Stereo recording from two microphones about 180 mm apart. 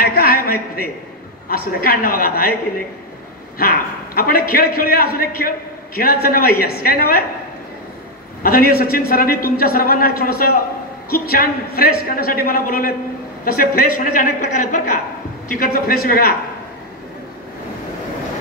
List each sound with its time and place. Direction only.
0.0 s a sound: 55° left (ahead or behind)
1.5 s a man's voice: 55° left (ahead or behind)
3.5 s a man's voice: 55° left (ahead or behind)
8.4 s a man's voice: 55° left (ahead or behind)